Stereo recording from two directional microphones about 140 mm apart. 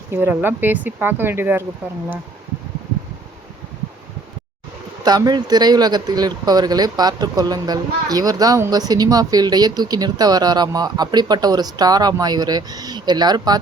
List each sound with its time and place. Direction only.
0.1 s speech: 15° right (ahead or behind)
5.0 s speech: 30° right (ahead or behind)